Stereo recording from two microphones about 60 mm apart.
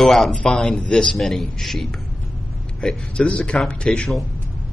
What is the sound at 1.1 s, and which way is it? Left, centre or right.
Speech, centre.